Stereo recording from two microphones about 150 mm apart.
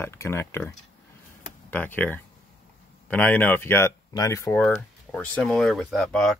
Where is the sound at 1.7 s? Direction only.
10° left (ahead or behind).